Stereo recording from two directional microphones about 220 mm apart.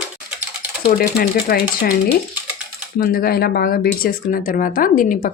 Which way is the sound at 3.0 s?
45° left (ahead or behind).